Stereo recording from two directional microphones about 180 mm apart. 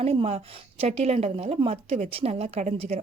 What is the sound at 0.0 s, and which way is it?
A woman's voice, 35° right (ahead or behind).